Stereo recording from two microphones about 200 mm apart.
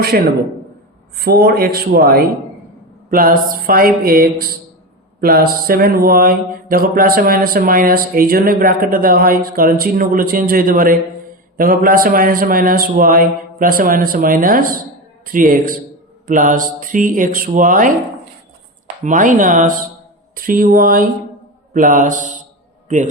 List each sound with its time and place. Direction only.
1.2 s mantra: 50° right (ahead or behind)
16.2 s speech: 40° right (ahead or behind)
19.0 s speech: 40° right (ahead or behind)
20.3 s mantra: 45° right (ahead or behind)
21.7 s a man's voice: 40° right (ahead or behind)